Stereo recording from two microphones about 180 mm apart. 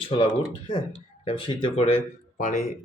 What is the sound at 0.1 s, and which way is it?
Speech, 30° left (ahead or behind).